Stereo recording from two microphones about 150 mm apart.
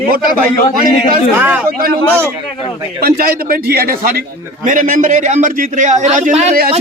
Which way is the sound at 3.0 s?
75° right (ahead or behind).